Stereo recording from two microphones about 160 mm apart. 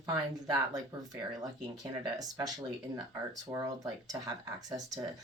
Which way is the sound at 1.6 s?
25° right (ahead or behind).